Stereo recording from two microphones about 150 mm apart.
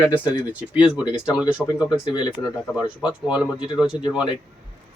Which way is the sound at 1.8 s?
30° left (ahead or behind).